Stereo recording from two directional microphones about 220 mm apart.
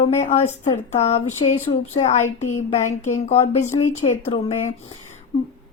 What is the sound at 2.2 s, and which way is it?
Speech, 75° left (ahead or behind).